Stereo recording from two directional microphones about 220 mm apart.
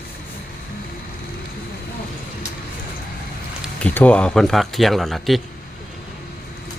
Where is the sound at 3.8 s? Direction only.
5° left (ahead or behind).